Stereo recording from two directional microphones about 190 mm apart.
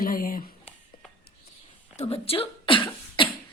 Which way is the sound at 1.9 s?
30° left (ahead or behind).